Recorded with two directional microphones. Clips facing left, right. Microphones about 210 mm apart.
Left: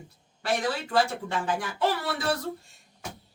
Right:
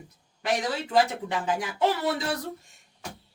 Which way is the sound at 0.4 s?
20° right (ahead or behind).